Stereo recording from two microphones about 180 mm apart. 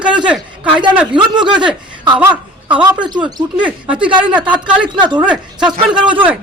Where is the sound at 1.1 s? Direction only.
25° right (ahead or behind).